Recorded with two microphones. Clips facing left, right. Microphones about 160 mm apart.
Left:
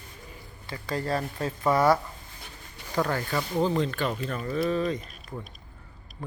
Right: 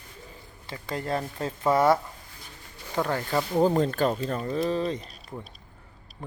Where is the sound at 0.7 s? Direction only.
20° right (ahead or behind).